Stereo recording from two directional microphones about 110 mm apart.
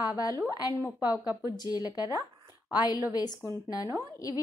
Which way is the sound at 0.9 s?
30° left (ahead or behind).